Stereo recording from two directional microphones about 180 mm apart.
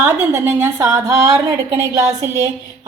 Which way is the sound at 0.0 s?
15° right (ahead or behind).